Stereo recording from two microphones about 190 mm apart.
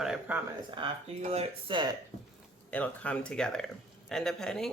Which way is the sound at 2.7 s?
5° left (ahead or behind).